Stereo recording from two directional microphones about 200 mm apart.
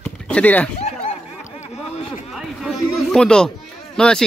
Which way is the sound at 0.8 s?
35° left (ahead or behind).